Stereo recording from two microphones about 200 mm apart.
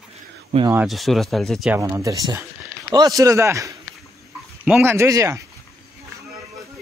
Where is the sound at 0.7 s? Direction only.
5° right (ahead or behind).